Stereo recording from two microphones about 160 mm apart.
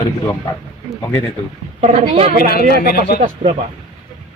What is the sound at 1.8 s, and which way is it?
Speech, 40° right (ahead or behind).